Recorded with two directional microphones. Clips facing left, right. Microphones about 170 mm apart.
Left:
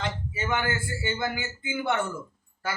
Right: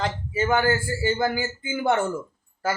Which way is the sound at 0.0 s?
40° right (ahead or behind).